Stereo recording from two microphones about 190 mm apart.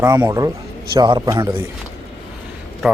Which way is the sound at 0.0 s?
20° right (ahead or behind).